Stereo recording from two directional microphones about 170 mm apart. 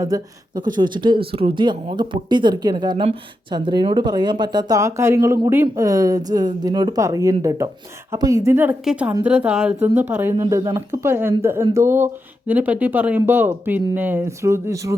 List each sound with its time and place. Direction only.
0.0 s speech: 20° right (ahead or behind)
8.8 s speech: 5° right (ahead or behind)
10.4 s speech: 25° right (ahead or behind)